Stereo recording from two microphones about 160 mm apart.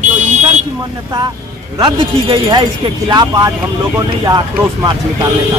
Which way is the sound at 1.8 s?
30° right (ahead or behind).